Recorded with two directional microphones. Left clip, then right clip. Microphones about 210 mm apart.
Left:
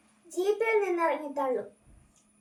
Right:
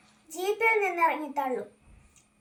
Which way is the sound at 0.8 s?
15° left (ahead or behind).